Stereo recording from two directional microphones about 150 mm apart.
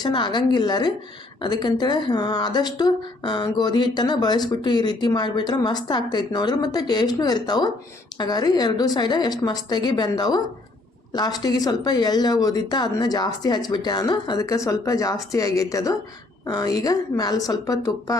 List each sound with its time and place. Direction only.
0.0 s speech: 30° left (ahead or behind)